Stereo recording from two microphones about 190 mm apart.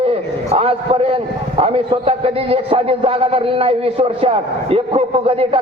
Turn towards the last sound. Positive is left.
turn(degrees=-30)  # may be behind; listen again after turning